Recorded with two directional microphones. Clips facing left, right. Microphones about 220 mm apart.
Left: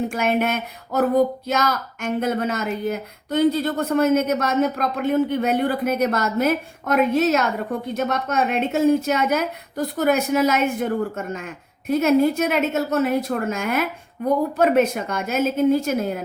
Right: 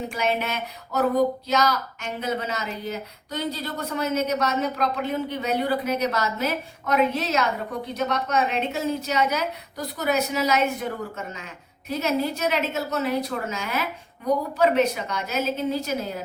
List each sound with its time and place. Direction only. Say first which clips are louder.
0.1 s a woman's voice: left 5 dB; 50° left (ahead or behind)